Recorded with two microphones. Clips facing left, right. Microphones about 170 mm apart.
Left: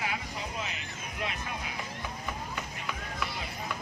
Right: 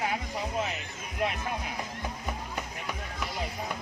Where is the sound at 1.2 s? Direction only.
50° right (ahead or behind).